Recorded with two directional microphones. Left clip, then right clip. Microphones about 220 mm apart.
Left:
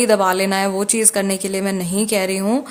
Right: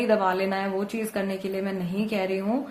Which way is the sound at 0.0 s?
35° left (ahead or behind).